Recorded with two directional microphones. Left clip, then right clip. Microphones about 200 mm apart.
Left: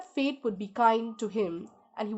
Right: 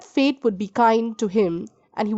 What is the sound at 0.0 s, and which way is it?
A woman's voice, 50° right (ahead or behind).